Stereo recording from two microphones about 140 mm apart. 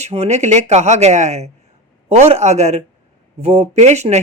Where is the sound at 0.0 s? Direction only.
50° right (ahead or behind).